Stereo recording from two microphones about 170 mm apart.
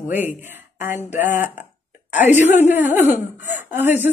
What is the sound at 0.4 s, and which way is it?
Speech, 10° right (ahead or behind).